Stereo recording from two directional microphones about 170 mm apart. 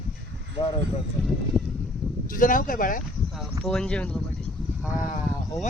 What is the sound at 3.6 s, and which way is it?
Speech, 5° left (ahead or behind).